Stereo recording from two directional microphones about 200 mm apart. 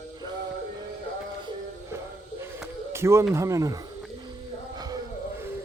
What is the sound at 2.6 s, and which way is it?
Speech, 15° right (ahead or behind).